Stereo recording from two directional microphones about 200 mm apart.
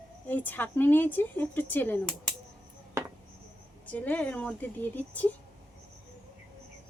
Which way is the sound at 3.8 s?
10° left (ahead or behind).